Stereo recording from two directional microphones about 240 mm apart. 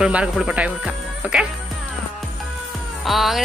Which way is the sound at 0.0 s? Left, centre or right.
Centre.